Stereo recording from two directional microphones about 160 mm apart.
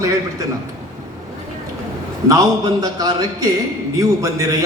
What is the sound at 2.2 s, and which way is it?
A man's voice, 20° right (ahead or behind).